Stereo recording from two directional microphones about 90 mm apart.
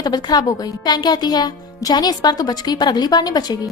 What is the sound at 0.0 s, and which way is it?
Speech, 50° left (ahead or behind).